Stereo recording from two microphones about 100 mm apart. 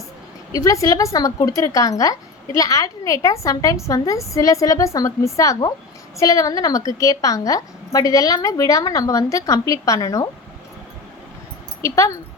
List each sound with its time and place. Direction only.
0.5 s a woman's voice: 35° left (ahead or behind)
11.8 s a woman's voice: 30° left (ahead or behind)